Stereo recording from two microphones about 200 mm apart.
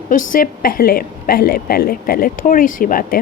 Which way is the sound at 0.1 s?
45° left (ahead or behind).